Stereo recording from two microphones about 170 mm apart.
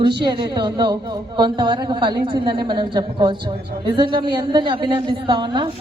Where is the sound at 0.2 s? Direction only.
25° right (ahead or behind).